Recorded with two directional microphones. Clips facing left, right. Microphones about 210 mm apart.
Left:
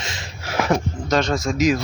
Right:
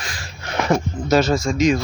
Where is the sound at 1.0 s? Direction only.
5° right (ahead or behind).